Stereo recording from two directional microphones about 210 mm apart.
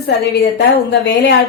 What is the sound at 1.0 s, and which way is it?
Speech, 55° left (ahead or behind).